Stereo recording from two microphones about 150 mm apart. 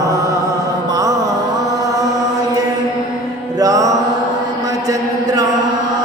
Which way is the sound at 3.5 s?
25° right (ahead or behind).